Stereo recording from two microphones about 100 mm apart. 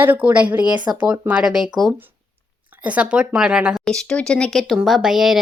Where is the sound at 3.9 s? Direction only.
5° left (ahead or behind).